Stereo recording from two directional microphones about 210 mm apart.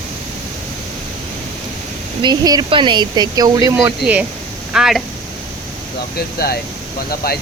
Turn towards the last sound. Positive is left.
turn(degrees=45)  # may be behind; listen again after turning